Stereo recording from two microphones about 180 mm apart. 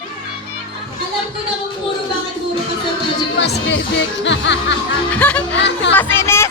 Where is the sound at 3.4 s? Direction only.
90° left.